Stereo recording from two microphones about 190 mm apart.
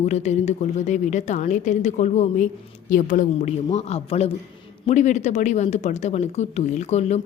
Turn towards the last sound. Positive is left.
turn(degrees=35)  # may be behind; listen again after turning